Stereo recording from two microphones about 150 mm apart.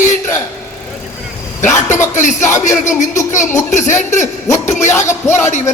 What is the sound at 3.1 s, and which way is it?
Music, 20° left (ahead or behind).